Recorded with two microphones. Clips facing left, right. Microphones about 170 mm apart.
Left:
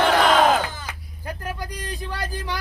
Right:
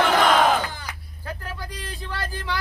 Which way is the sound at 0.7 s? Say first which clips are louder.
Left 1 dB; 20° left (ahead or behind).